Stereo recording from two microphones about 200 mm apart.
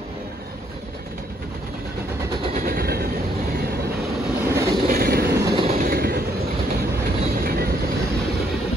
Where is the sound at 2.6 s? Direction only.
50° right (ahead or behind).